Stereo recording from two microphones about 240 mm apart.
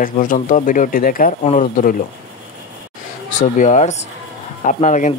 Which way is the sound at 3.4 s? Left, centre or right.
Left.